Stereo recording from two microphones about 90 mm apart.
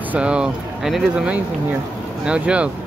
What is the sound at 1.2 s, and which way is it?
Speech, 15° right (ahead or behind).